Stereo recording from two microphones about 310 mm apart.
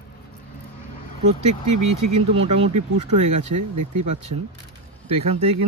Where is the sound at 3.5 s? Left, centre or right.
Right.